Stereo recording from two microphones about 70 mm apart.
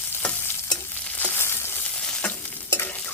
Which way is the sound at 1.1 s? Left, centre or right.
Left.